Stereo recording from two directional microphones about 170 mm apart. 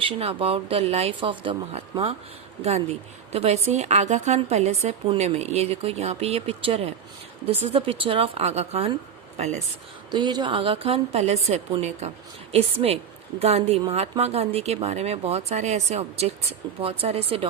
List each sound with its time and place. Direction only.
0.0 s a woman's voice: 35° right (ahead or behind)
10.1 s a woman's voice: 25° right (ahead or behind)